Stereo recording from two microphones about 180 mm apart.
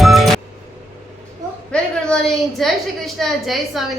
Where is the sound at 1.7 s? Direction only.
5° left (ahead or behind).